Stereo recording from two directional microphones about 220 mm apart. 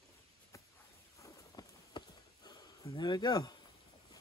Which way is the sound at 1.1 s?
15° left (ahead or behind).